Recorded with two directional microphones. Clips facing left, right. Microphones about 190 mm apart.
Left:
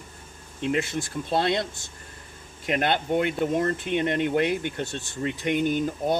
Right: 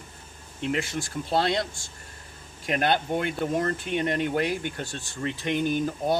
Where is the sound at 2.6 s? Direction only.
20° left (ahead or behind).